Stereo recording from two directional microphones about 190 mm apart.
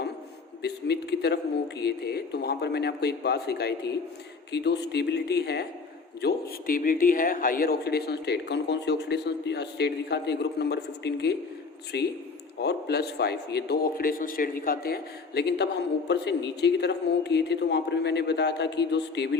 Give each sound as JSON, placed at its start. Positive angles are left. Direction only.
{"t": 0.6, "sound": "a man's voice", "side_deg": 60}
{"t": 6.2, "sound": "a man's voice", "side_deg": 45}